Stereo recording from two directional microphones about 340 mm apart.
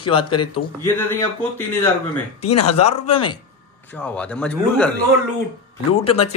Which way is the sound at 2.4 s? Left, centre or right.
Left.